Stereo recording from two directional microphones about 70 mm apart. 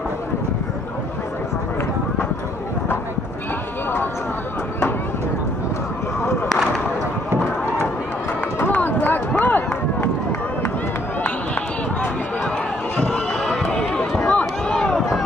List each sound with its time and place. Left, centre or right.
8.5 s run: left
11.2 s run: left
13.0 s run: centre
14.7 s a sound: centre